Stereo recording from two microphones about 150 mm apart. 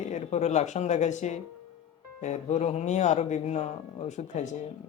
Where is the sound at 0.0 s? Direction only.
50° left (ahead or behind).